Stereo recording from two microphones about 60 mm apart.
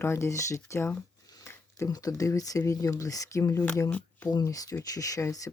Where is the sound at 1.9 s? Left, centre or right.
Left.